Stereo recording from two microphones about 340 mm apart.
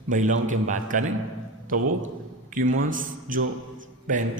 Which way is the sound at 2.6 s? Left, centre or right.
Right.